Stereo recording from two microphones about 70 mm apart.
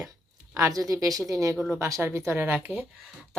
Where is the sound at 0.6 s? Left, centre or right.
Right.